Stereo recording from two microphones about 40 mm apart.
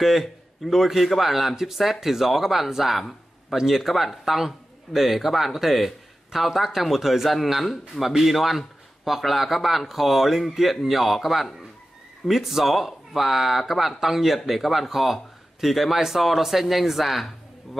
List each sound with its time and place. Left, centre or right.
0.0 s a man's voice: centre